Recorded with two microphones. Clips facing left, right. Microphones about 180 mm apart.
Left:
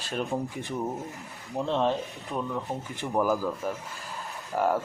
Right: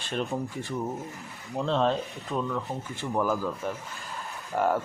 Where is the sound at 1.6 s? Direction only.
15° left (ahead or behind).